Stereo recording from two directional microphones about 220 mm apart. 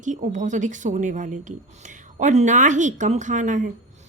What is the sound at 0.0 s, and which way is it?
A woman's voice, 35° right (ahead or behind).